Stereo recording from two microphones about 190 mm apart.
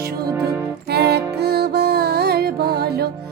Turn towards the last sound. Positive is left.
turn(degrees=-55)  # may be behind; listen again after turning